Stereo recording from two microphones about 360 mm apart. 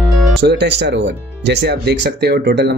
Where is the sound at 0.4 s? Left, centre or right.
Right.